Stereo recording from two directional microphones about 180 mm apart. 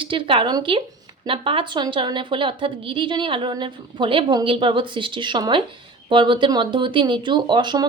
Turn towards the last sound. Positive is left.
turn(degrees=-25)  # may be behind; listen again after turning